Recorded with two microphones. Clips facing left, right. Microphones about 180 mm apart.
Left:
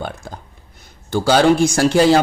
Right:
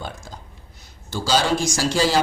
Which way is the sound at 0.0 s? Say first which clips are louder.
Left 6 dB; 60° left (ahead or behind).